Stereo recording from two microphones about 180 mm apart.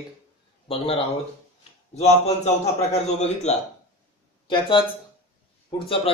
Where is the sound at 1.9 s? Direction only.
40° left (ahead or behind).